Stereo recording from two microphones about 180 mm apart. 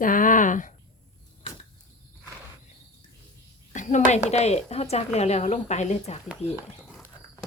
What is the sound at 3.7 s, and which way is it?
Speech, 40° left (ahead or behind).